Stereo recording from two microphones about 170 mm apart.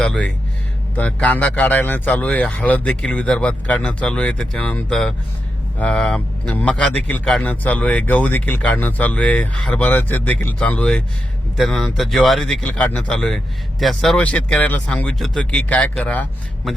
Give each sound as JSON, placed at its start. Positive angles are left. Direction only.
{"t": 0.0, "sound": "speech", "side_deg": 5}